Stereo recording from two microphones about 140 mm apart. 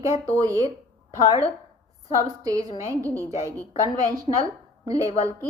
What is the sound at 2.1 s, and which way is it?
A woman's voice, 25° right (ahead or behind).